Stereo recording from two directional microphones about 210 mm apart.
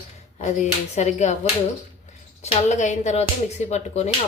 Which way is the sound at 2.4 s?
35° left (ahead or behind).